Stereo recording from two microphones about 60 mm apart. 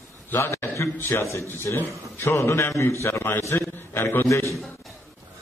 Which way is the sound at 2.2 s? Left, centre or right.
Left.